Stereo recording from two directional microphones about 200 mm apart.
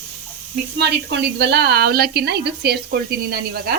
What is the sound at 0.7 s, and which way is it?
Speech, 55° right (ahead or behind).